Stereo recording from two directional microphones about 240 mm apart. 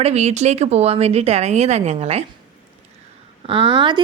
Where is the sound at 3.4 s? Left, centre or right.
Right.